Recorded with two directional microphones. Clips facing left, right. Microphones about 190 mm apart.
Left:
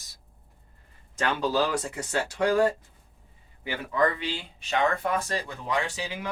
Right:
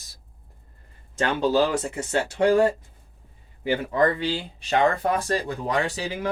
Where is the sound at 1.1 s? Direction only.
25° right (ahead or behind).